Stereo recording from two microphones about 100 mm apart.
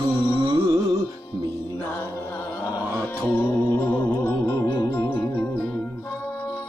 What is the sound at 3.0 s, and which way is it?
Music, 20° left (ahead or behind).